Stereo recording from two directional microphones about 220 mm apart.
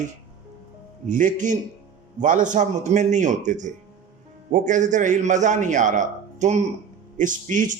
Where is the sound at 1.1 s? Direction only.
35° right (ahead or behind).